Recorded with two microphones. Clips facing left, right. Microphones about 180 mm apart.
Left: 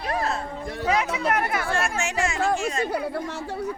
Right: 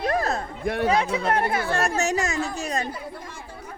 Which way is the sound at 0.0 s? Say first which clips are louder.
Right 3 dB; 40° right (ahead or behind).